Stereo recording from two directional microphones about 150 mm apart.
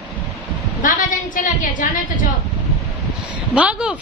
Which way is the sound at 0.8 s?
60° left (ahead or behind).